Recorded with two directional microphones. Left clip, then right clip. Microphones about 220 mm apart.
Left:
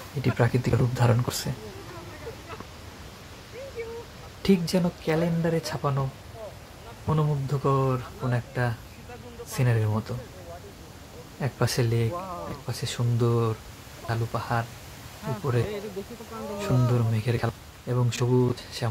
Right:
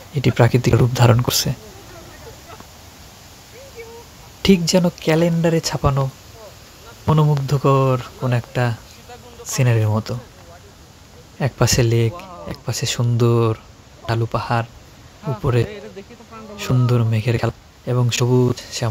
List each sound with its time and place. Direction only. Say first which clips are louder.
0.2 s a man's voice: right 9 dB; 40° right (ahead or behind)
4.4 s a man's voice: right 9 dB; 35° right (ahead or behind)
7.1 s a man's voice: right 9 dB; 35° right (ahead or behind)
11.3 s a man's voice: right 9 dB; 35° right (ahead or behind)
12.2 s a sound: even; 10° right (ahead or behind)
12.6 s a man's voice: right 9 dB; 35° right (ahead or behind)